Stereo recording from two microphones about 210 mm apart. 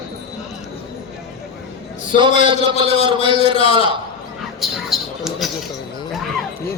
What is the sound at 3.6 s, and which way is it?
Speech, 25° left (ahead or behind).